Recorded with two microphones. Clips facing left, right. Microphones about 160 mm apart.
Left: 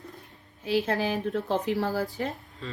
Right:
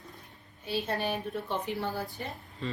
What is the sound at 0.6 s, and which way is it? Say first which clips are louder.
A woman's voice: left 6 dB; 90° left.